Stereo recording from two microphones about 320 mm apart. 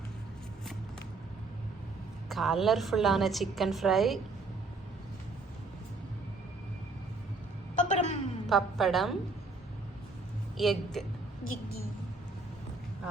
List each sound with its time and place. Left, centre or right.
2.3 s a woman's voice: centre
7.8 s a sound: left
8.4 s a woman's voice: centre
10.6 s a woman's voice: centre